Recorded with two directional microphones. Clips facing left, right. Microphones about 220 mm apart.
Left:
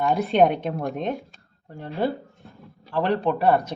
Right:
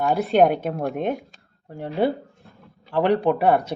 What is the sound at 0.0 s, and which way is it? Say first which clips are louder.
A woman's voice: right 1 dB; centre (ahead or behind).